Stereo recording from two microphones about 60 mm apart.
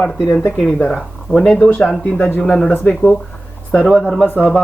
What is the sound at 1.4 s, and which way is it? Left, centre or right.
Speech, centre.